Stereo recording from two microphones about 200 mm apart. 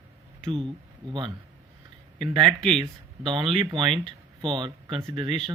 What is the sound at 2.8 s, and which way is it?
Speech, 25° right (ahead or behind).